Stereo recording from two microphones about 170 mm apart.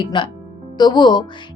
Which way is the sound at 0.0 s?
25° left (ahead or behind).